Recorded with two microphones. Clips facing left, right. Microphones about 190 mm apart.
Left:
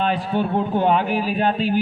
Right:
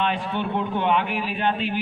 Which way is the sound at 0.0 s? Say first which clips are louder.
Left 4 dB; 35° left (ahead or behind).